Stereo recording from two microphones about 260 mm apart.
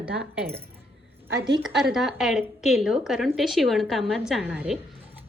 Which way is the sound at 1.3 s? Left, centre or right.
Right.